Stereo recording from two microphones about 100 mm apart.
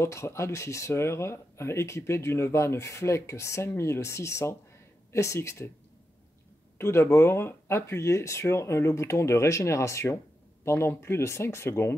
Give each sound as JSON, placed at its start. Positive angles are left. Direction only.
{"t": 0.0, "sound": "speech", "side_deg": 30}
{"t": 6.8, "sound": "speech", "side_deg": 25}